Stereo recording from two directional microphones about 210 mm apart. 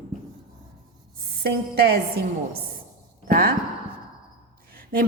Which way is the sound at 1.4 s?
45° right (ahead or behind).